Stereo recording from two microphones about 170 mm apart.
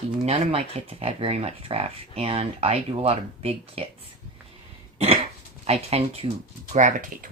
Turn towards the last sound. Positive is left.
turn(degrees=-50)  # may be behind; listen again after turning